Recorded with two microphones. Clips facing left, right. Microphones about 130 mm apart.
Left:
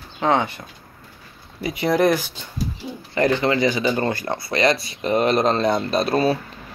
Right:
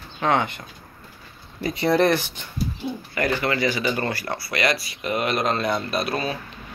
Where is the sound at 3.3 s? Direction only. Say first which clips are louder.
Left 4 dB; 20° left (ahead or behind).